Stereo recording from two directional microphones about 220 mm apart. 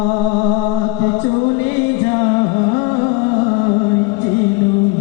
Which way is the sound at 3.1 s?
15° left (ahead or behind).